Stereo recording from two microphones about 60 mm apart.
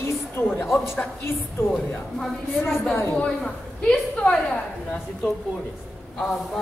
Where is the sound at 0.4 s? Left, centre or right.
Left.